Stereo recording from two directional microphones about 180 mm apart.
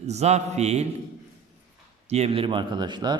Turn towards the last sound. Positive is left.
turn(degrees=-25)  # may be behind; listen again after turning